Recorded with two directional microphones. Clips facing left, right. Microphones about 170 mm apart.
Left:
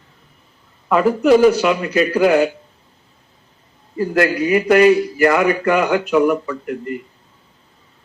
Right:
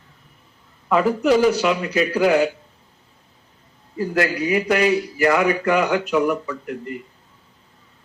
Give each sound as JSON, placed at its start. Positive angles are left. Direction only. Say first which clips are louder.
{"t": 0.9, "sound": "a man's voice", "louder": "left 4 dB", "side_deg": 55}
{"t": 3.9, "sound": "a man's voice", "louder": "left 4 dB", "side_deg": 55}